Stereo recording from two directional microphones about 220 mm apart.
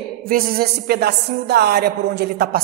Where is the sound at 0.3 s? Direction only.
40° right (ahead or behind).